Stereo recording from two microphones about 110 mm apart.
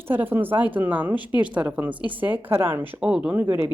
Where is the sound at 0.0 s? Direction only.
20° right (ahead or behind).